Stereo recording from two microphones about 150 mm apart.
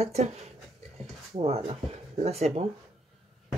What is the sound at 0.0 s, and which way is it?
Speech, 45° right (ahead or behind).